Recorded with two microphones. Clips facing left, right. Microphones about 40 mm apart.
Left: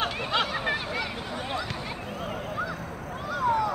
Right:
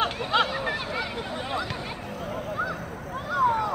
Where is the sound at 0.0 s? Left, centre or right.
Centre.